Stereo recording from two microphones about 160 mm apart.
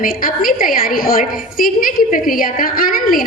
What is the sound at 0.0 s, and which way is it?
A woman's voice, 60° left (ahead or behind).